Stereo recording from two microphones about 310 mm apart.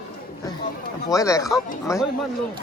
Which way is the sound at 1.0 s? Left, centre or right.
Centre.